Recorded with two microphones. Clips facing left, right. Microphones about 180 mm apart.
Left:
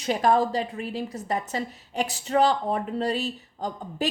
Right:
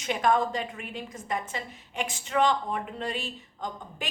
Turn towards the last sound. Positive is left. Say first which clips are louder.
# left 6 dB
turn(degrees=40)  # may be behind; listen again after turning